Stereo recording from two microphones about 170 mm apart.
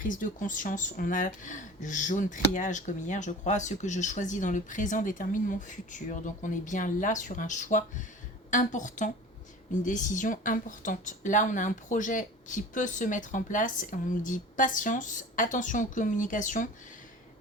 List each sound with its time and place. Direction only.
0.0 s speech: 50° left (ahead or behind)